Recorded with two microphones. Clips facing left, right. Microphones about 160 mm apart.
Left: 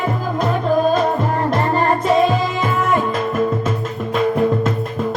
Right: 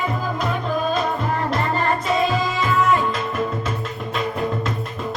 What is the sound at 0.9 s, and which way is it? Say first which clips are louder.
Music: left 5 dB; 40° left (ahead or behind).